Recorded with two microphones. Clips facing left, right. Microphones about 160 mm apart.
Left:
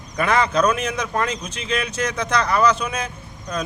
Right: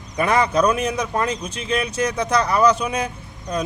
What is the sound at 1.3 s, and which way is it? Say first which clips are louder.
Speech: right 2 dB; 30° right (ahead or behind).